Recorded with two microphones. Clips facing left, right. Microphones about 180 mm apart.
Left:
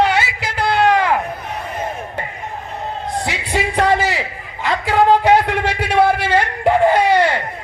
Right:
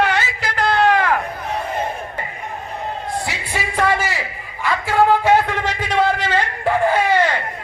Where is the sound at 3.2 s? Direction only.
20° left (ahead or behind).